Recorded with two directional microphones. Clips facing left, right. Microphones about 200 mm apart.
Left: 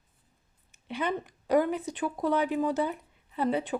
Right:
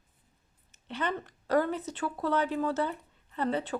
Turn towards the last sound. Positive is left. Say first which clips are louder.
# left 2 dB
turn(degrees=15)  # may be behind; listen again after turning